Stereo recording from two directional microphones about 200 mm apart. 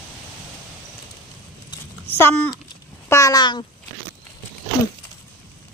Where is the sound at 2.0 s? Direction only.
10° left (ahead or behind).